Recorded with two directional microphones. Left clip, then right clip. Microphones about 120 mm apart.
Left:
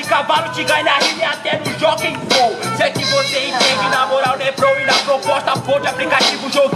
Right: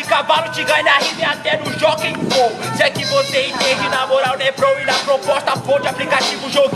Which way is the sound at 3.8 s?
10° right (ahead or behind).